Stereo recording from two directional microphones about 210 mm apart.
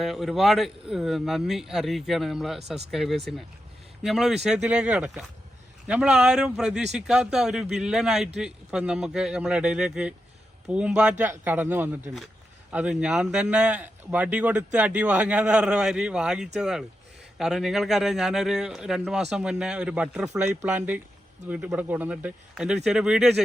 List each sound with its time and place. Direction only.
0.0 s a man's voice: centre (ahead or behind)